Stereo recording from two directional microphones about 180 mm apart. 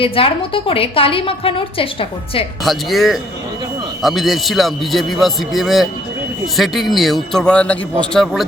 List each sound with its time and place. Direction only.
0.0 s a woman's voice: 30° left (ahead or behind)
2.6 s a man's voice: centre (ahead or behind)